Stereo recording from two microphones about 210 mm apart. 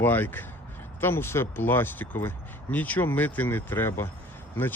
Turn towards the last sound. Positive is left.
turn(degrees=10)  # may be behind; listen again after turning